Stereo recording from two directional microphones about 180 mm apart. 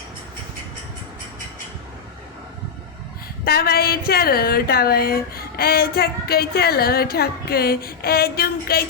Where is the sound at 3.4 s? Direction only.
60° left (ahead or behind).